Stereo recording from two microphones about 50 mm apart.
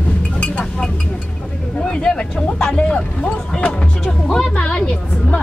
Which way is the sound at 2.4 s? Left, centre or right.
Centre.